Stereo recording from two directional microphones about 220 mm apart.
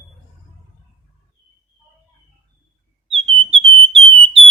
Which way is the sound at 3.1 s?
25° right (ahead or behind).